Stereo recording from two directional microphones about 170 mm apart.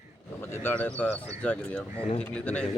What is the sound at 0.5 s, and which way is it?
Speech, 10° left (ahead or behind).